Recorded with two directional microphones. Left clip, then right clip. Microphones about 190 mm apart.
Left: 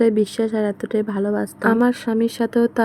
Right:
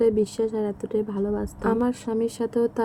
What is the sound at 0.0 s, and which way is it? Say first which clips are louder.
Speech: left 3 dB; 25° left (ahead or behind).